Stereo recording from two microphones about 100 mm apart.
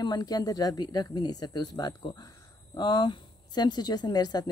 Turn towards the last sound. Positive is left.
turn(degrees=40)  # may be behind; listen again after turning